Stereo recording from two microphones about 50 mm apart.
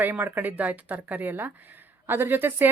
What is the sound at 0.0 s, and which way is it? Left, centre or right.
Speech, right.